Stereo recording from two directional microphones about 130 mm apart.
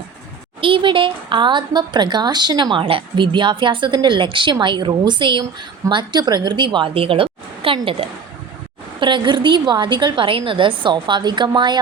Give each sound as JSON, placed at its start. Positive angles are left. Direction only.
{"t": 0.6, "sound": "a woman's voice", "side_deg": -40}
{"t": 9.0, "sound": "speech", "side_deg": -35}